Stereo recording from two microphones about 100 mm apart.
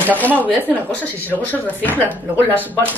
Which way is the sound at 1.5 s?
15° left (ahead or behind).